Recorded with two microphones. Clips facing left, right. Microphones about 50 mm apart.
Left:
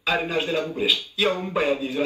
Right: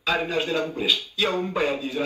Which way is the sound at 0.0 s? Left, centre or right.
Left.